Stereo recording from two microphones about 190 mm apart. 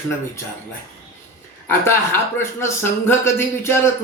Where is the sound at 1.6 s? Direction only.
10° left (ahead or behind).